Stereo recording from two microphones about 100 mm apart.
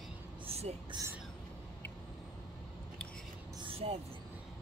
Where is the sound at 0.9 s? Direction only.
45° right (ahead or behind).